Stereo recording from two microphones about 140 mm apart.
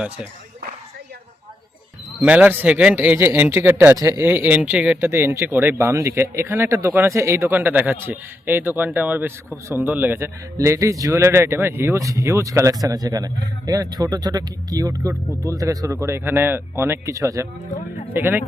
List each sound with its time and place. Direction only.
2.1 s speech: 10° right (ahead or behind)